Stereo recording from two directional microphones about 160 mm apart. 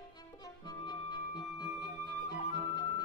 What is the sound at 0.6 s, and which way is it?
Music, 25° left (ahead or behind).